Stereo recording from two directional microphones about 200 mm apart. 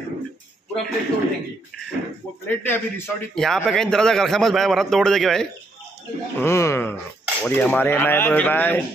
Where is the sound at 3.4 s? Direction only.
Centre (ahead or behind).